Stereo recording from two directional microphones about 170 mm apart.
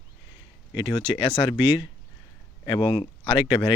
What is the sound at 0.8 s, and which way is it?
Speech, 25° left (ahead or behind).